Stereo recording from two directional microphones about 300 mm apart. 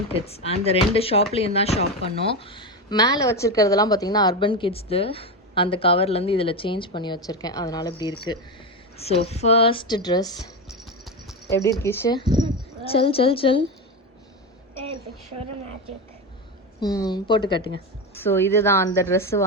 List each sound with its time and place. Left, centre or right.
0.1 s speech: centre
9.0 s speech: centre
10.7 s music: centre
11.4 s speech: centre
16.8 s speech: centre